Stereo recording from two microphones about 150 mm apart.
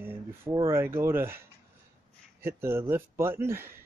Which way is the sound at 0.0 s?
15° right (ahead or behind).